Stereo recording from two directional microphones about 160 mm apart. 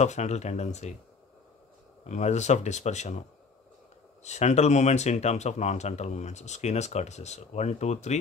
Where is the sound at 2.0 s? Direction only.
45° left (ahead or behind).